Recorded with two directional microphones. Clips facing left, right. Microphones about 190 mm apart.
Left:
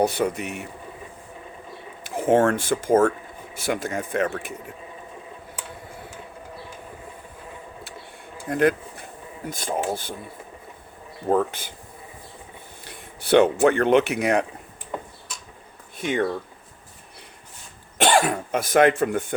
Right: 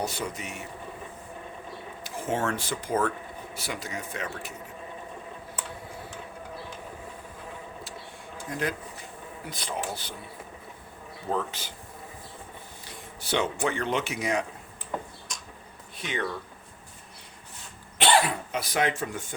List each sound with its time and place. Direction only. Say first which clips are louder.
0.0 s speech: left 10 dB; 60° left (ahead or behind)
2.0 s speech: left 10 dB; 55° left (ahead or behind)
8.4 s speech: left 11 dB; 60° left (ahead or behind)
9.5 s speech: left 8 dB; 50° left (ahead or behind)
11.3 s speech: left 9 dB; 50° left (ahead or behind)
12.8 s speech: left 2 dB; 60° left (ahead or behind)
16.0 s speech: left 8 dB; 50° left (ahead or behind)
17.9 s speech: left 4 dB; 45° left (ahead or behind)